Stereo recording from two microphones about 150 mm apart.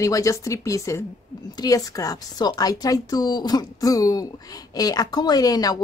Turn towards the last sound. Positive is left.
turn(degrees=25)  # may be behind; listen again after turning